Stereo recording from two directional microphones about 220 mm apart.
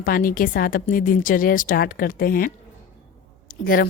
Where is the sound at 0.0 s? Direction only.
40° left (ahead or behind).